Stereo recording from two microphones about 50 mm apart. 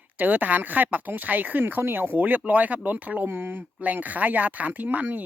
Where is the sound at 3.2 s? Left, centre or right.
Right.